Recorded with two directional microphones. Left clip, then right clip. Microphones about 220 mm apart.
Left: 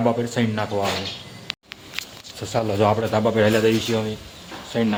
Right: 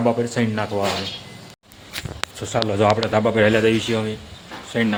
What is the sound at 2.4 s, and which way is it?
A man's voice, 5° right (ahead or behind).